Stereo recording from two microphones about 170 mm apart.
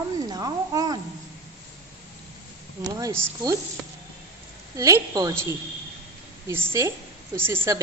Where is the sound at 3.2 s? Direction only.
20° right (ahead or behind).